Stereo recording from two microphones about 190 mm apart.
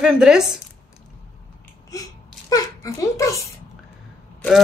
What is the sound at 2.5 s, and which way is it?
Speech, 15° left (ahead or behind).